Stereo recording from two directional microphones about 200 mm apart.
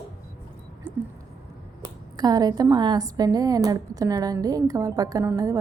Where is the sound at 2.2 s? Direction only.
20° right (ahead or behind).